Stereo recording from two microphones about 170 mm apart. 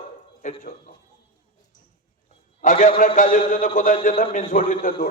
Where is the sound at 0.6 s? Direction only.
55° left (ahead or behind).